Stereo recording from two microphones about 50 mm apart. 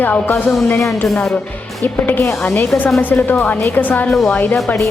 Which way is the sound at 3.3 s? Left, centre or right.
Left.